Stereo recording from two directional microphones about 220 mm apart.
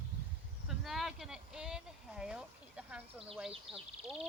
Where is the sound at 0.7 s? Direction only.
Centre (ahead or behind).